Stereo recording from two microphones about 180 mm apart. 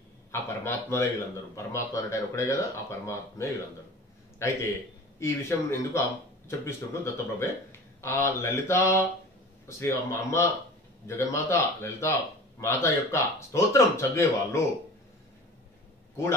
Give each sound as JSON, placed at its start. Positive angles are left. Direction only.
{"t": 0.3, "sound": "a man's voice", "side_deg": 15}